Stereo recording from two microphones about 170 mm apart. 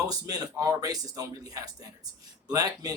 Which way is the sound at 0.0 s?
20° right (ahead or behind).